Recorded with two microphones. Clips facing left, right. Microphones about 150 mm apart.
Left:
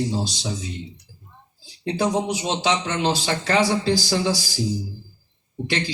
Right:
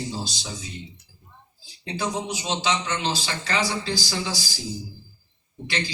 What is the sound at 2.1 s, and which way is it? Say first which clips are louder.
A man's voice: left 5 dB; 55° left (ahead or behind).